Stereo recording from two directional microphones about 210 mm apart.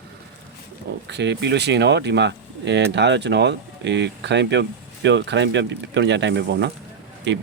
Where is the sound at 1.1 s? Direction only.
55° right (ahead or behind).